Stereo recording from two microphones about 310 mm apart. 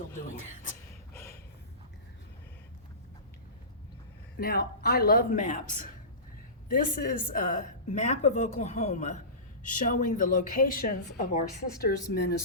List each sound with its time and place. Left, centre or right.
4.4 s a woman's voice: left